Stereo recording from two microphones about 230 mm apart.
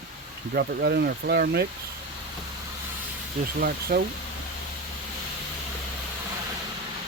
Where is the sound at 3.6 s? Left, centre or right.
Right.